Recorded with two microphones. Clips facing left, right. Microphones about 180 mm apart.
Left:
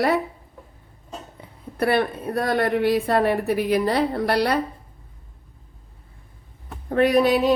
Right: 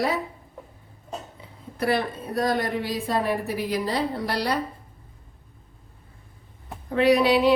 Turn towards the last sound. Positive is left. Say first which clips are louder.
# left 1 dB
turn(degrees=45)  # may be behind; listen again after turning